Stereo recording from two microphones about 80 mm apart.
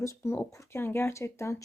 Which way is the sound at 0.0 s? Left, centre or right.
Left.